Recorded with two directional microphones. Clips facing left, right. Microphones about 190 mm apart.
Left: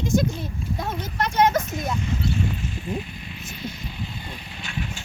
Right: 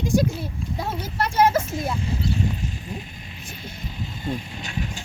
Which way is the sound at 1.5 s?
30° right (ahead or behind).